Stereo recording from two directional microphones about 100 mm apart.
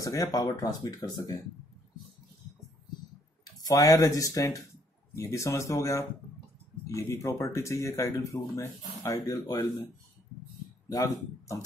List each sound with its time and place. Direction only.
0.0 s speech: 35° left (ahead or behind)
3.4 s speech: 40° left (ahead or behind)
10.9 s speech: 35° left (ahead or behind)